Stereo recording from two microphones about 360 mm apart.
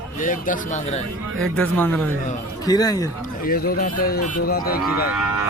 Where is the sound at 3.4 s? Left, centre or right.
Left.